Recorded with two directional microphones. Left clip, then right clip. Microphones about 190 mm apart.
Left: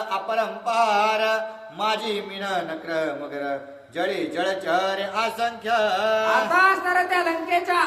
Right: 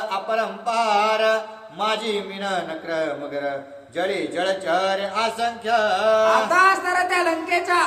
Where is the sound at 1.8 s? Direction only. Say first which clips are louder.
Right 1 dB; 15° left (ahead or behind).